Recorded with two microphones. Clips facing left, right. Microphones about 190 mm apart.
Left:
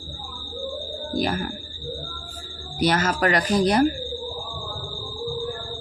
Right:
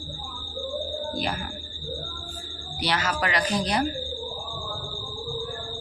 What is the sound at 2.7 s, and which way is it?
Speech, 45° left (ahead or behind).